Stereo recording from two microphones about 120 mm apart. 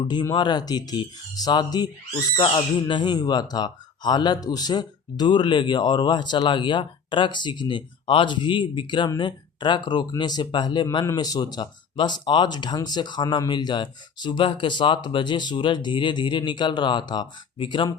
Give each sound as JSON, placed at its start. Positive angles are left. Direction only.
{"t": 0.0, "sound": "speech", "side_deg": 40}